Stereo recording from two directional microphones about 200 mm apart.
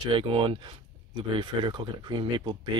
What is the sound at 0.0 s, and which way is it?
Speech, 25° right (ahead or behind).